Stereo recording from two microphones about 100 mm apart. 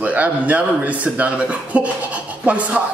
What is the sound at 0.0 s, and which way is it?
A man's voice, 15° right (ahead or behind).